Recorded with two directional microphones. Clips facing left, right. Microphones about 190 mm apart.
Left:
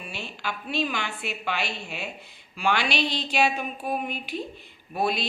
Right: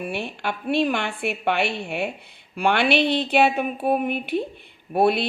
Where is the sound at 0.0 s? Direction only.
60° right (ahead or behind).